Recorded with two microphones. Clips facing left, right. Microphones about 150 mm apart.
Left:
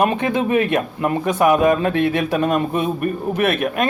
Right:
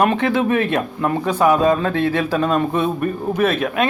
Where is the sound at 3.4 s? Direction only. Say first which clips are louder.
Right 1 dB; 60° left (ahead or behind).